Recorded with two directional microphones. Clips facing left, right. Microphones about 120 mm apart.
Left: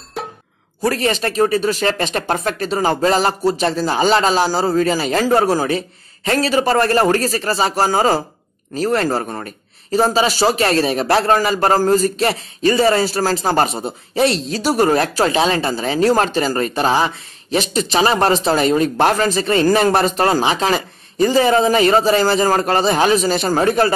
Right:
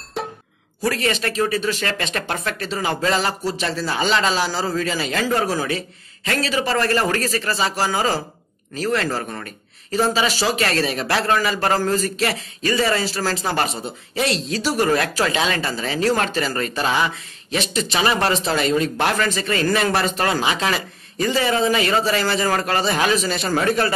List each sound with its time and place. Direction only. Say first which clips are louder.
0.2 s music: even; centre (ahead or behind)
0.8 s speech: left 4 dB; 40° left (ahead or behind)